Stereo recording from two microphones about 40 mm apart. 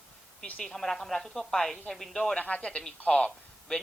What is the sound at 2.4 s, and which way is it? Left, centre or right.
Speech, left.